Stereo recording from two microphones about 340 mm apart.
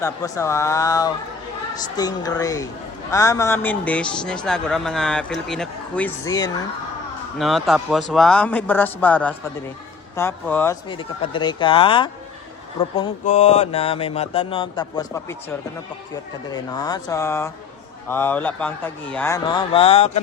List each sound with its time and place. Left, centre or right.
0.0 s mantra: centre
3.1 s a man's voice: centre
10.2 s mantra: centre
18.1 s a man's voice: centre
19.1 s mantra: centre